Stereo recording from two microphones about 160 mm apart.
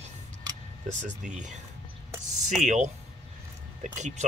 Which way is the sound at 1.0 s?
50° right (ahead or behind).